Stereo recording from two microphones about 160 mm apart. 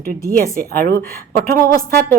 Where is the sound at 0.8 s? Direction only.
70° right (ahead or behind).